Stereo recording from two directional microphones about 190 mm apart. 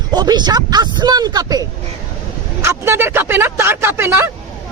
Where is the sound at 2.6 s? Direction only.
15° right (ahead or behind).